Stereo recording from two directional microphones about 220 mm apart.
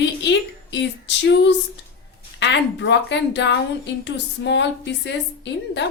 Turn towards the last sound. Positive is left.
turn(degrees=55)  # may be behind; listen again after turning